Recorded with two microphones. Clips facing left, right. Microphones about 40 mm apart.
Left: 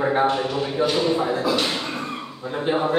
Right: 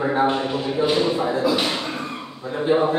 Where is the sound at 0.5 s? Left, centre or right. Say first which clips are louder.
Even; centre.